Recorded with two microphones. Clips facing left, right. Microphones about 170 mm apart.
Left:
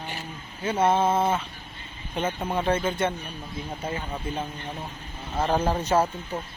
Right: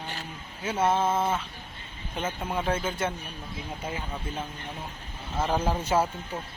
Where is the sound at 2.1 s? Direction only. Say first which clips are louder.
Left 4 dB; centre (ahead or behind).